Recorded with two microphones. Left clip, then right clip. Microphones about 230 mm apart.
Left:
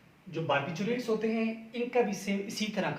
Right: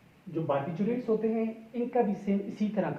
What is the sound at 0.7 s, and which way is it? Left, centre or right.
Speech, left.